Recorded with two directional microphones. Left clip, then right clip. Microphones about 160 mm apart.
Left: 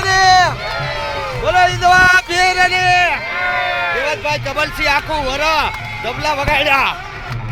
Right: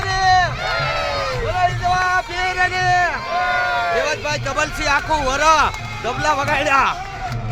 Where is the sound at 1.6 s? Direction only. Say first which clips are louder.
Left 8 dB; 65° left (ahead or behind).